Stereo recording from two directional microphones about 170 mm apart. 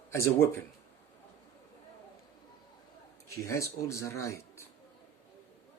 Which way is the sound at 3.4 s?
20° left (ahead or behind).